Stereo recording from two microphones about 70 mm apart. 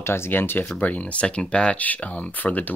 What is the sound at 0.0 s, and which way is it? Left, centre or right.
Speech, left.